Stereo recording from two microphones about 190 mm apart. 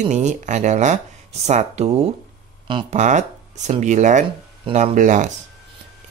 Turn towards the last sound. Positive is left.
turn(degrees=-40)  # may be behind; listen again after turning